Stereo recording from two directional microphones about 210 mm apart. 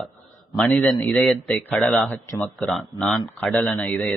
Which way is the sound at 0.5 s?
Centre (ahead or behind).